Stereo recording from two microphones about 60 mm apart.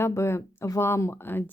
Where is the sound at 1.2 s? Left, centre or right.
Left.